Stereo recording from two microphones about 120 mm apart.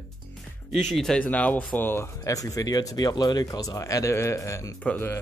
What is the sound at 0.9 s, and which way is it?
Speech, 5° left (ahead or behind).